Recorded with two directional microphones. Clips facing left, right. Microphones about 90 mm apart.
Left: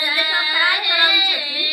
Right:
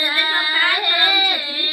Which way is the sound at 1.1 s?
40° right (ahead or behind).